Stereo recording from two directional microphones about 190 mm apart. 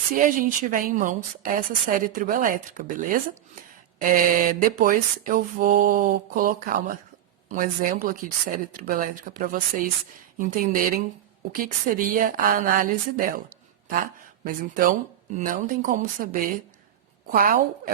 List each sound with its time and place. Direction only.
0.1 s a woman's voice: 45° right (ahead or behind)